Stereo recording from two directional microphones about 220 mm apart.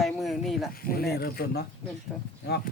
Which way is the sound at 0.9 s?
45° left (ahead or behind).